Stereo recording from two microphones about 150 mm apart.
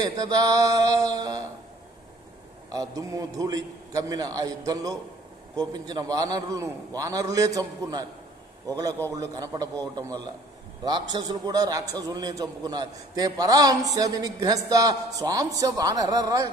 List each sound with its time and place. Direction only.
0.0 s a man's voice: 25° right (ahead or behind)
2.7 s a man's voice: 20° right (ahead or behind)